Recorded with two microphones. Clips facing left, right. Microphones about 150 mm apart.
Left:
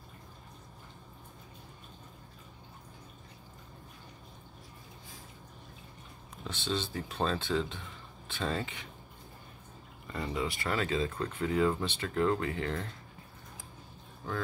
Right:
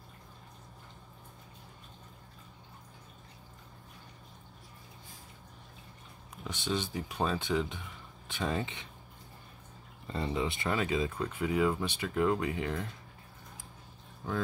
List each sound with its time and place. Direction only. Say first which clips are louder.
6.4 s speech: right 1 dB; 15° right (ahead or behind)
10.0 s speech: right 2 dB; 25° right (ahead or behind)